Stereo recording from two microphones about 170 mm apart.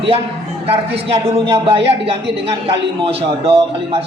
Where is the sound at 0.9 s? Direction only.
35° right (ahead or behind).